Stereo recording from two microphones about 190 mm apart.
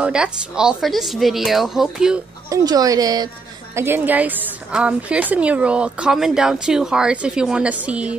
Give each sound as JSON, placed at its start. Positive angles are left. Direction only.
{"t": 0.0, "sound": "speech", "side_deg": -5}
{"t": 2.5, "sound": "a woman's voice", "side_deg": -20}